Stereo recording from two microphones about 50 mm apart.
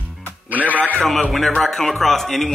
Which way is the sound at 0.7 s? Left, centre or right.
Left.